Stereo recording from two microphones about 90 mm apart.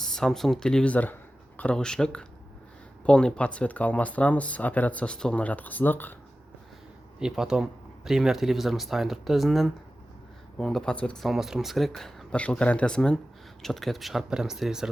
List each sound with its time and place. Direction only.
0.0 s speech: 5° left (ahead or behind)
0.9 s speech: 20° left (ahead or behind)
7.2 s speech: 5° right (ahead or behind); by 11.3 s 10° left (ahead or behind)
11.3 s speech: 5° right (ahead or behind)